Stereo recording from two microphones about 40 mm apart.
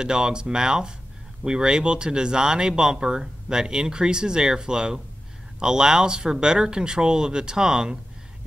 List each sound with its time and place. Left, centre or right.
0.0 s speech: right